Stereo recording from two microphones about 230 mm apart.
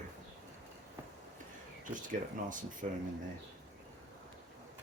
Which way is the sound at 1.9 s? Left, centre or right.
Right.